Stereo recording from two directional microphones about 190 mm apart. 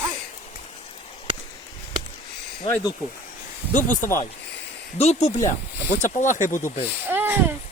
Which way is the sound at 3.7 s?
40° left (ahead or behind).